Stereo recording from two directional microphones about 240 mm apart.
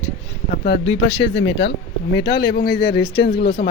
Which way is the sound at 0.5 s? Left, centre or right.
Left.